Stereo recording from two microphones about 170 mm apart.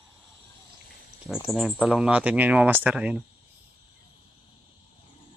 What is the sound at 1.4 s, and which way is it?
Speech, centre (ahead or behind).